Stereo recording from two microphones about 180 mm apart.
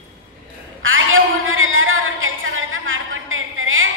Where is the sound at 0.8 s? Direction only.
90° right.